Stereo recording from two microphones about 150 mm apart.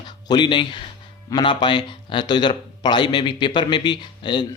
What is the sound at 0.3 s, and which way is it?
A man's voice, 30° left (ahead or behind).